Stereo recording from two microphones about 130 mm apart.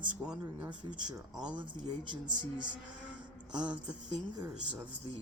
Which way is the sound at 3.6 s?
10° right (ahead or behind).